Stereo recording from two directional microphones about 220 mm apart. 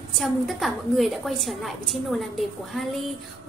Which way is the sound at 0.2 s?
Centre (ahead or behind).